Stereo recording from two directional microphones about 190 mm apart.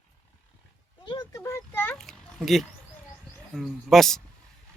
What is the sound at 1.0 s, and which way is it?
Speech, 20° left (ahead or behind).